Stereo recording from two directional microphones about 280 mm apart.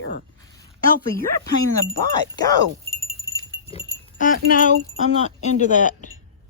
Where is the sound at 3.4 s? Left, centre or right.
Centre.